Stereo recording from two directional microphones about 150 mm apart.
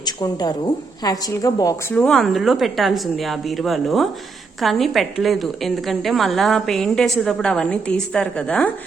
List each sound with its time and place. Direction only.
0.0 s a woman's voice: 25° left (ahead or behind)
1.9 s a woman's voice: 5° left (ahead or behind)